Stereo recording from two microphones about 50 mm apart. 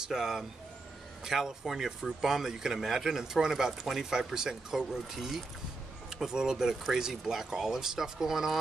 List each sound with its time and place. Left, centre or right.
0.1 s speech: centre